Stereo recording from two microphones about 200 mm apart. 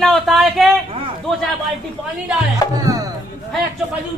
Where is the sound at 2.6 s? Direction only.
20° left (ahead or behind).